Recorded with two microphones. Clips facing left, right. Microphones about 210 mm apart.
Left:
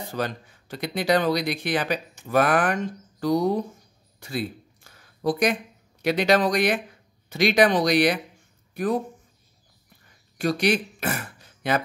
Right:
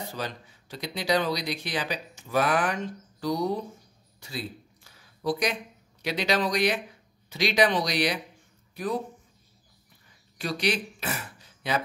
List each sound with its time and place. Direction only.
0.1 s speech: 55° left (ahead or behind)
4.2 s a sound: 50° left (ahead or behind)
6.0 s speech: 50° left (ahead or behind)
10.3 s speech: 50° left (ahead or behind)